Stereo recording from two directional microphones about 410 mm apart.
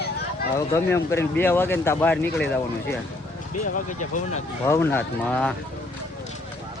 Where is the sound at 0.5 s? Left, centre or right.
Centre.